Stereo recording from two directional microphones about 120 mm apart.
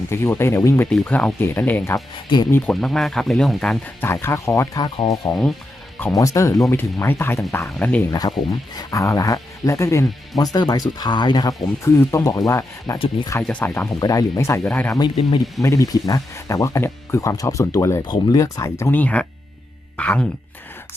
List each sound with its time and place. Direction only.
0.1 s speech: 20° left (ahead or behind)
2.8 s speech: centre (ahead or behind)
4.0 s speech: 20° left (ahead or behind)
8.1 s speech: 30° left (ahead or behind)
13.5 s speech: 15° left (ahead or behind)
14.0 s speech: 30° left (ahead or behind)
14.7 s speech: 15° left (ahead or behind)
14.9 s speech: 40° left (ahead or behind)
15.6 s speech: 25° left (ahead or behind); by 20.2 s 10° left (ahead or behind)